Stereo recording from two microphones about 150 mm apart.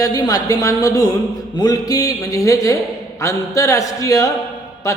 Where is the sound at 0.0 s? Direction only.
25° left (ahead or behind).